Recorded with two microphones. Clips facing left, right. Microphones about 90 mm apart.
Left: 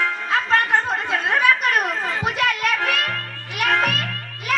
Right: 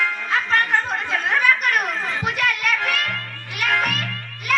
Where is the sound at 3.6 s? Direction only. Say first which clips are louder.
Left 2 dB; 30° left (ahead or behind).